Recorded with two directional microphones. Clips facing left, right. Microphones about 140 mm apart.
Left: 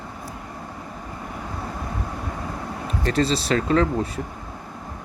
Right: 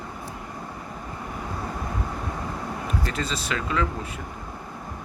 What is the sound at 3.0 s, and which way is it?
Speech, 35° left (ahead or behind).